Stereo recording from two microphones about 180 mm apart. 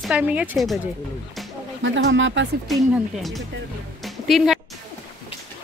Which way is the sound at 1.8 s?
85° right.